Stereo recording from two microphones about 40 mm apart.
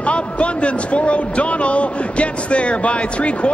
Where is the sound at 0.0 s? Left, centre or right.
Left.